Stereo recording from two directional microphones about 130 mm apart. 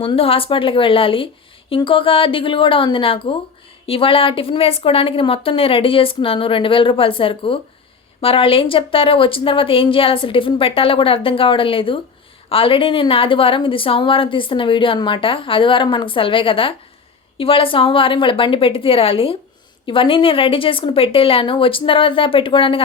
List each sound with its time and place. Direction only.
0.0 s a woman's voice: 45° left (ahead or behind)